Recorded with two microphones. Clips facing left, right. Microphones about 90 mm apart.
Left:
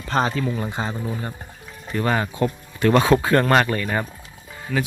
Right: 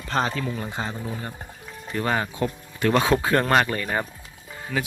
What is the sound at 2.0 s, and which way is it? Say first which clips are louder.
A man's voice: left 3 dB; 5° right (ahead or behind).